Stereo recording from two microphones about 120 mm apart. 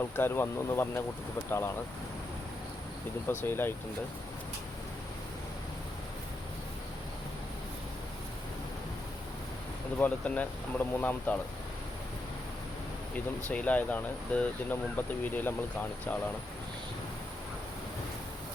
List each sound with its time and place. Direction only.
0.2 s speech: 20° left (ahead or behind)
3.2 s speech: 20° left (ahead or behind)
10.0 s speech: 15° left (ahead or behind)
13.1 s speech: 10° left (ahead or behind)